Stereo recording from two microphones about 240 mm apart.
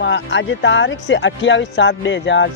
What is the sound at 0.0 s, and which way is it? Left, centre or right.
Speech, left.